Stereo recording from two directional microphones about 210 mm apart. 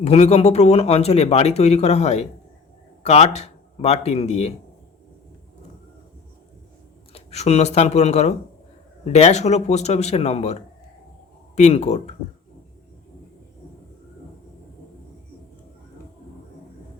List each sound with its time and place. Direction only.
0.0 s speech: 30° left (ahead or behind)
7.1 s speech: 30° left (ahead or behind)